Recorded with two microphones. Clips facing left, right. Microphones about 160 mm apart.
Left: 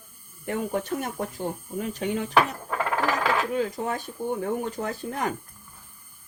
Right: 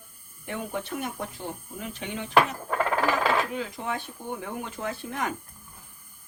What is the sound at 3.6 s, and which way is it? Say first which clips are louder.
Speech: left 5 dB; 45° left (ahead or behind).